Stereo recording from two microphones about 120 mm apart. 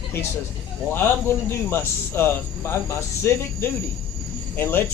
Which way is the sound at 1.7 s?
20° left (ahead or behind).